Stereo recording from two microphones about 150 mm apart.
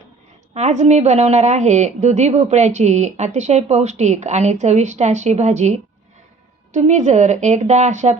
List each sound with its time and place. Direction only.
0.5 s a woman's voice: 50° right (ahead or behind)